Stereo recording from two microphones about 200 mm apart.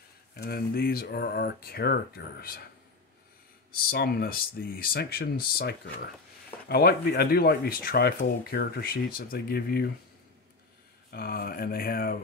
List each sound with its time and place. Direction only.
0.3 s speech: 50° left (ahead or behind)
3.7 s speech: 50° left (ahead or behind)
11.1 s speech: 50° left (ahead or behind)